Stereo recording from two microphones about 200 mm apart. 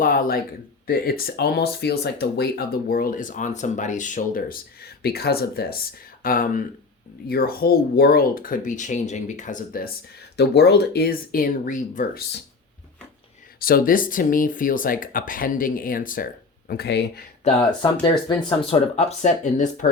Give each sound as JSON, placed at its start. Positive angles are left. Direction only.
{"t": 0.0, "sound": "speech", "side_deg": 45}
{"t": 13.6, "sound": "speech", "side_deg": 50}
{"t": 17.4, "sound": "speech", "side_deg": 25}